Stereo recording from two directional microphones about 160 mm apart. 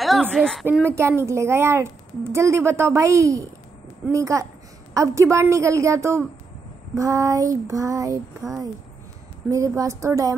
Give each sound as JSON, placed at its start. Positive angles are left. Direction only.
{"t": 0.0, "sound": "speech", "side_deg": 0}
{"t": 0.7, "sound": "a woman's voice", "side_deg": -15}